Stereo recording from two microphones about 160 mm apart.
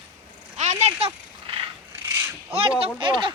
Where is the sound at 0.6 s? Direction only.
45° right (ahead or behind).